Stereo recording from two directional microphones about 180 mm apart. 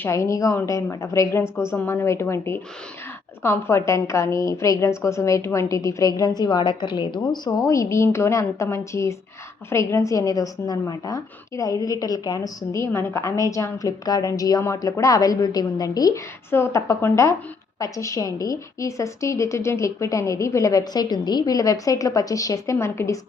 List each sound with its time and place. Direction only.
0.0 s a woman's voice: 15° left (ahead or behind)